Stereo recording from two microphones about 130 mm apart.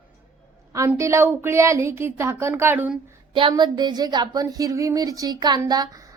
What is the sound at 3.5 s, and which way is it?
Speech, 35° right (ahead or behind).